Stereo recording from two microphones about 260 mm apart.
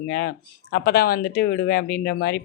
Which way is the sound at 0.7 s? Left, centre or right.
Left.